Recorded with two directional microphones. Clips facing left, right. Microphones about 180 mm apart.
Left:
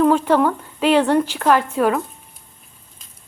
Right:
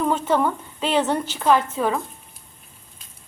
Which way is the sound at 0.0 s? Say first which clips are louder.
Left 6 dB; centre (ahead or behind).